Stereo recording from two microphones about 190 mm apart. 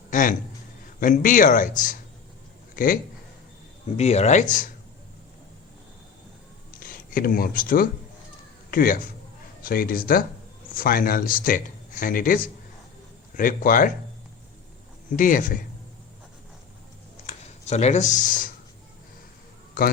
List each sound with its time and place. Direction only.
0.1 s speech: 45° left (ahead or behind)
3.9 s speech: 35° left (ahead or behind)
6.7 s speech: 50° left (ahead or behind)
15.1 s speech: 45° left (ahead or behind)
17.2 s speech: 35° left (ahead or behind)